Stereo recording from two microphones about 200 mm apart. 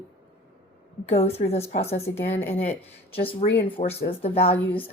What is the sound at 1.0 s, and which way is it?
A woman's voice, 30° left (ahead or behind).